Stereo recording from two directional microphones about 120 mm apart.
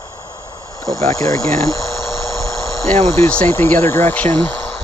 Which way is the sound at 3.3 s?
15° left (ahead or behind).